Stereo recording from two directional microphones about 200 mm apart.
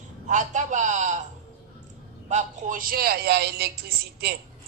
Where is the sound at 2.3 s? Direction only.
40° right (ahead or behind).